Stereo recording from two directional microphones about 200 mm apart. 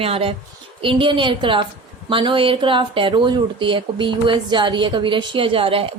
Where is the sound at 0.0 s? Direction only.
30° right (ahead or behind).